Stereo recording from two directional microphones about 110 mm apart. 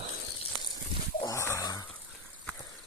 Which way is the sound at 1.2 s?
25° left (ahead or behind).